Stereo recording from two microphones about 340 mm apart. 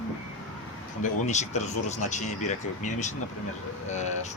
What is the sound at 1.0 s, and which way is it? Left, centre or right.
Speech, left.